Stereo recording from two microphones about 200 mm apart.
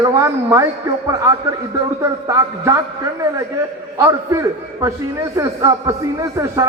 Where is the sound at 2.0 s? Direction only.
15° right (ahead or behind).